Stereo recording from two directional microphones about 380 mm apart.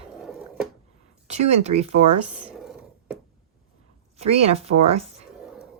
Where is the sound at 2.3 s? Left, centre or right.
Centre.